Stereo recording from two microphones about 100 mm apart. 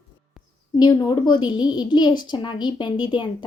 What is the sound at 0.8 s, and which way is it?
A woman's voice, 50° left (ahead or behind).